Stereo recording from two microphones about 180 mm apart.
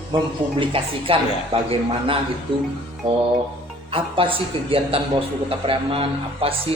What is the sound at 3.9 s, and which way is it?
A man's voice, 30° right (ahead or behind).